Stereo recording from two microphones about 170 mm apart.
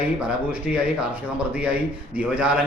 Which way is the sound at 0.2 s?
5° right (ahead or behind).